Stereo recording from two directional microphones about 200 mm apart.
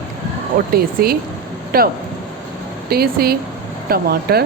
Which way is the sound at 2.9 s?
50° right (ahead or behind).